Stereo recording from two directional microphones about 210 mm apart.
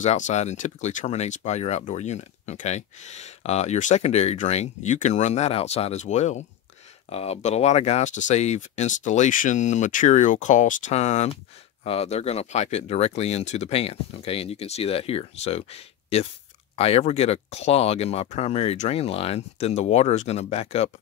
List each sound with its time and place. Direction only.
0.0 s speech: 35° left (ahead or behind)